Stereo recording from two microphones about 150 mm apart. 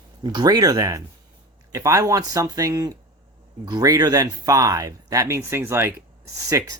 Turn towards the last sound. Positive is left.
turn(degrees=-25)  # may be behind; listen again after turning